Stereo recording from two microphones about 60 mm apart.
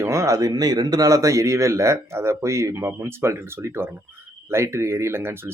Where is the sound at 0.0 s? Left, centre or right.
Right.